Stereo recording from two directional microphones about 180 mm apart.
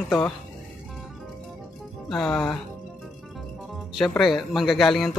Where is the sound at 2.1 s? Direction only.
5° left (ahead or behind).